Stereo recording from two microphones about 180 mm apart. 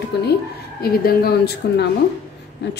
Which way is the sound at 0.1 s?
70° left (ahead or behind).